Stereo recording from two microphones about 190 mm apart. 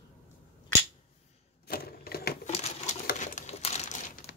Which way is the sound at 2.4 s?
35° left (ahead or behind).